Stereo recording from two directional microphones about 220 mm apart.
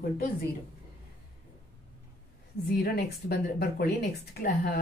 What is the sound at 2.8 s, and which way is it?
Speech, 45° left (ahead or behind).